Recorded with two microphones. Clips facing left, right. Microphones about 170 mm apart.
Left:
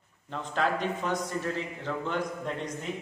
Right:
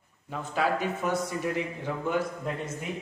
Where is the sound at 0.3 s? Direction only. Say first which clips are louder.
Right 1 dB; 10° right (ahead or behind).